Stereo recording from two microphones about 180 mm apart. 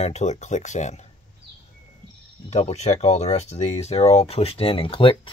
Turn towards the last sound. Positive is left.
turn(degrees=30)  # may be behind; listen again after turning